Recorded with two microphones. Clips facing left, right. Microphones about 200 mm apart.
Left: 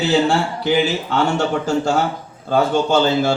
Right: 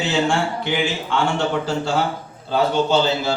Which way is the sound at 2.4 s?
50° left (ahead or behind).